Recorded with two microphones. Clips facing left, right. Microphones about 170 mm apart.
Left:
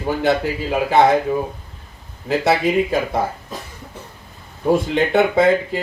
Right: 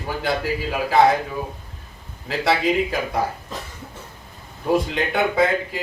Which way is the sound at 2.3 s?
25° left (ahead or behind).